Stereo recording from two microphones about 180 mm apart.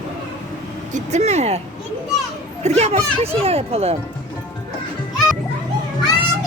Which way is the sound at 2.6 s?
35° right (ahead or behind).